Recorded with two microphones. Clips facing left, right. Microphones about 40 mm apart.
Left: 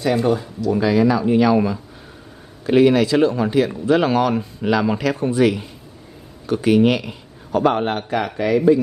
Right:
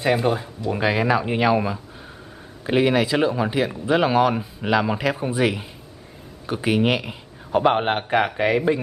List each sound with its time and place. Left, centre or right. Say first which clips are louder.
0.1 s speech: left 2 dB; centre
0.6 s speech: left 5 dB; right
2.6 s speech: left 5 dB; centre; by 8.7 s right